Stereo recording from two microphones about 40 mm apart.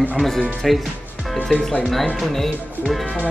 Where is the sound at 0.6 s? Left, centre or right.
Centre.